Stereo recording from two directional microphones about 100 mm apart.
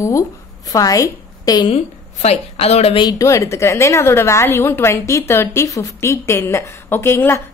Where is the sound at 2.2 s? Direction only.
90° left.